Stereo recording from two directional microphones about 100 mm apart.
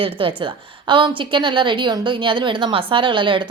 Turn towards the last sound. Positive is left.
turn(degrees=-55)  # may be behind; listen again after turning